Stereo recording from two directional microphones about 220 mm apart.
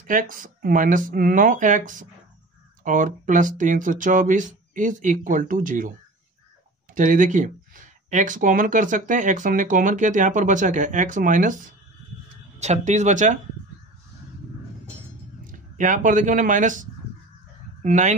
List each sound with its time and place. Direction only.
0.0 s speech: 40° right (ahead or behind)
7.0 s speech: 35° right (ahead or behind)
15.8 s speech: 35° right (ahead or behind)
17.8 s speech: 30° right (ahead or behind)